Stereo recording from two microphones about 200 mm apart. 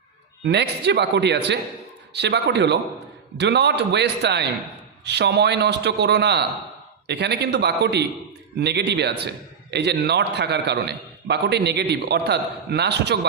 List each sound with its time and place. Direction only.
0.4 s a man's voice: 60° right (ahead or behind)